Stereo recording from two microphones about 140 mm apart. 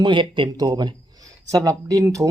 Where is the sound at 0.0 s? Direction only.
35° right (ahead or behind).